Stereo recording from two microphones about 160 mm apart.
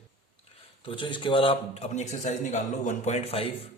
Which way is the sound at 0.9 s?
30° left (ahead or behind).